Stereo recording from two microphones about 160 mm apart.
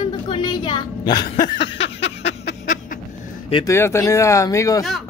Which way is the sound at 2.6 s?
50° left (ahead or behind).